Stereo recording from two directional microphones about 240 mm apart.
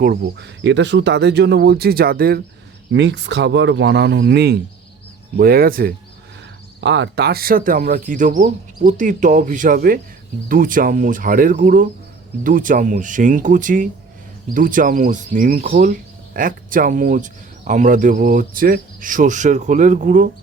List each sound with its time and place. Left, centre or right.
0.0 s speech: right
6.8 s speech: right